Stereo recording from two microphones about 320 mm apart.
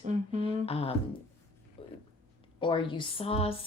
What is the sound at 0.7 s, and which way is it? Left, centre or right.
Speech, centre.